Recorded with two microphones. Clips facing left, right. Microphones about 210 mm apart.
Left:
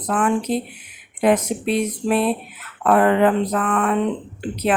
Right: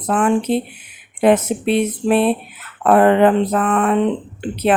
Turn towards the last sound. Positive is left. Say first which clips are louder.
# right 4 dB
turn(degrees=-25)  # may be behind; listen again after turning